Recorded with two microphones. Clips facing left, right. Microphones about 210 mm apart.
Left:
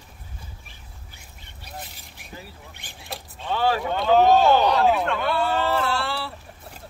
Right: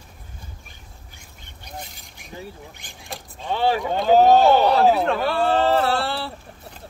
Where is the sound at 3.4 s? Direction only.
20° right (ahead or behind).